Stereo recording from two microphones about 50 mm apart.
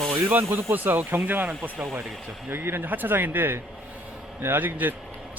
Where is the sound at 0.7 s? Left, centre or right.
Right.